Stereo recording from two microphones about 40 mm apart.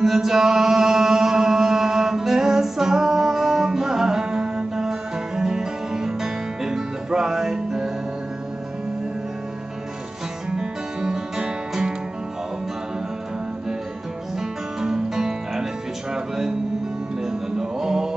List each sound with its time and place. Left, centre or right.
0.0 s music: centre
10.5 s music: centre
14.8 s music: centre